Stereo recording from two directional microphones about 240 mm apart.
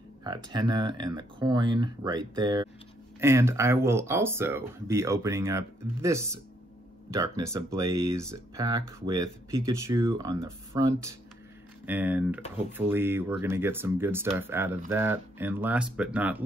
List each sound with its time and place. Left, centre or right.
0.2 s speech: centre